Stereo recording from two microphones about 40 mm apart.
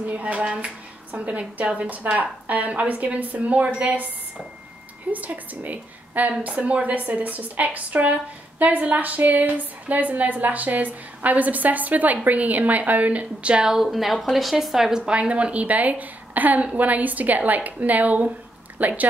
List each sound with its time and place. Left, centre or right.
0.0 s a woman's voice: right
0.4 s speech: right
1.1 s a woman's voice: right
5.1 s a woman's voice: right
13.8 s a woman's voice: centre; by 19.0 s right